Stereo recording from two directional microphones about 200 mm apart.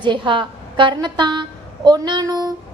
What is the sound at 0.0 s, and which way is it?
A woman's voice, 25° right (ahead or behind).